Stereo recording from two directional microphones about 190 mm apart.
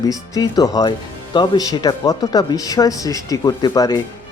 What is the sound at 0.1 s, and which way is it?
Speech, 20° left (ahead or behind).